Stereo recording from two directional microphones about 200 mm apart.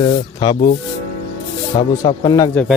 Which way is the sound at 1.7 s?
25° left (ahead or behind).